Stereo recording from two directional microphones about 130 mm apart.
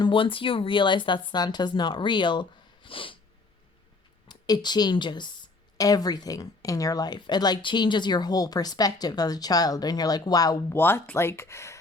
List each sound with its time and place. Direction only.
0.0 s speech: 40° left (ahead or behind)
4.3 s speech: 30° left (ahead or behind)
10.8 s speech: 15° left (ahead or behind)